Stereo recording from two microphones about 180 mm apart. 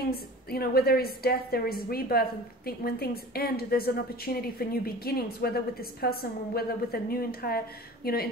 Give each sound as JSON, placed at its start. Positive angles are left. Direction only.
{"t": 0.1, "sound": "a woman's voice", "side_deg": 60}